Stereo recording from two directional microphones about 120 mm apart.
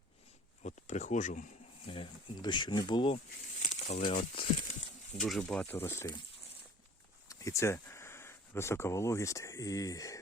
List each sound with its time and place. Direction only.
0.6 s speech: 80° left
1.9 s speech: 40° left (ahead or behind)
3.6 s crumpling: 90° left
5.2 s speech: 5° left (ahead or behind)
5.7 s speech: 20° left (ahead or behind)
7.3 s speech: 25° left (ahead or behind)